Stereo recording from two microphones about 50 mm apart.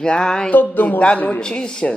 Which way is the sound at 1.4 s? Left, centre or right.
Centre.